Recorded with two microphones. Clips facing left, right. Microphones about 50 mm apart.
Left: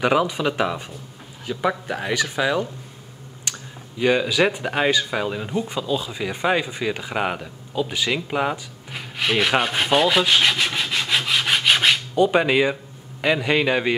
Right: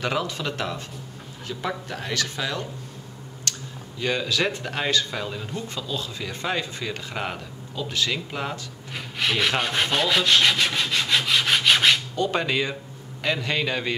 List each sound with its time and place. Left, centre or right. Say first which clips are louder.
0.0 s speech: left 7 dB; centre
3.5 s clicking: even; centre
4.0 s speech: left 6 dB; centre
8.9 s rub: left 3 dB; centre
12.2 s a man's voice: left 7 dB; centre